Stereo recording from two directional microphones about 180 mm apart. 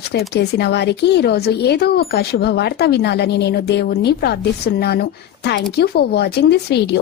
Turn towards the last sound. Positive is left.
turn(degrees=70)  # may be behind; listen again after turning